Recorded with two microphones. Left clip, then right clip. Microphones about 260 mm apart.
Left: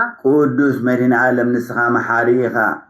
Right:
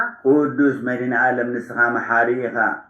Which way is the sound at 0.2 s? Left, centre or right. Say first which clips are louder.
Left 2 dB; left.